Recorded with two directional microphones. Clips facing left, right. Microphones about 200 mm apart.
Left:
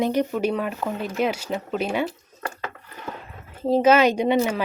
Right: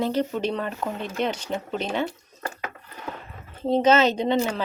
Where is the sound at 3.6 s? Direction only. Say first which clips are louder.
Left 2 dB; 5° left (ahead or behind).